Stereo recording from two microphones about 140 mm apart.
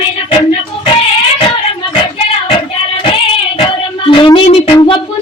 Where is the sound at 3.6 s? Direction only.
35° left (ahead or behind).